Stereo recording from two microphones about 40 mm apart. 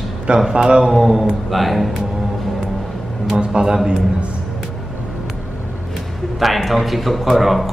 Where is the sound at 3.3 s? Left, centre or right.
Right.